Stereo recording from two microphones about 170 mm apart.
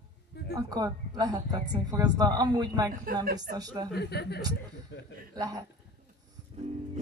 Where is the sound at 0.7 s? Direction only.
25° right (ahead or behind).